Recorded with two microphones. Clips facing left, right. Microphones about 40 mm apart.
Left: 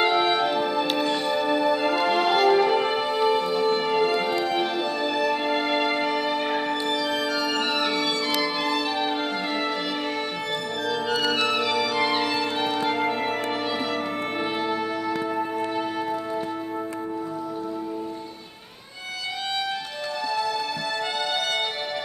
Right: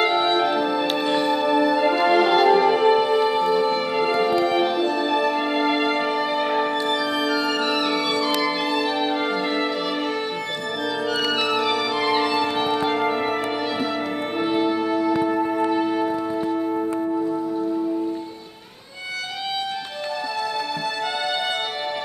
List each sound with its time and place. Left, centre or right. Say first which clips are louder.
0.0 s music: right 2 dB; centre
1.0 s music: right 4 dB; centre
1.3 s music: right 3 dB; centre
11.2 s music: right 3 dB; centre
14.4 s music: right 7 dB; centre